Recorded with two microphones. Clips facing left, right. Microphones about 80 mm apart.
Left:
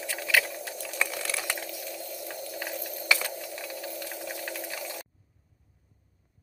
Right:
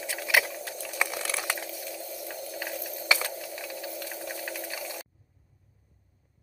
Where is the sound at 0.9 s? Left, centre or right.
Centre.